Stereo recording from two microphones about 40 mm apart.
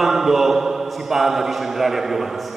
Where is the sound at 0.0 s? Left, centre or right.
Centre.